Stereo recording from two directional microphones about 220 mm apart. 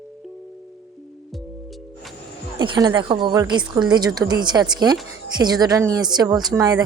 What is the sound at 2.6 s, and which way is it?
A woman's voice, 20° right (ahead or behind).